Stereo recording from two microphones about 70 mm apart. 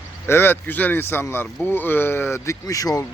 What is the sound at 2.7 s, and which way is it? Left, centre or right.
Speech, left.